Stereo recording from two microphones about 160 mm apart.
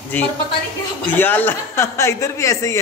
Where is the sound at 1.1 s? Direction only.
10° left (ahead or behind).